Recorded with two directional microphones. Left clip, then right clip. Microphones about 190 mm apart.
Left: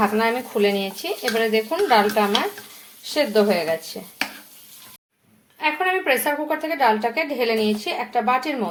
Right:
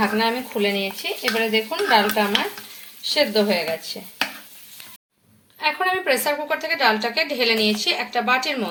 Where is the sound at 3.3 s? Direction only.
20° left (ahead or behind).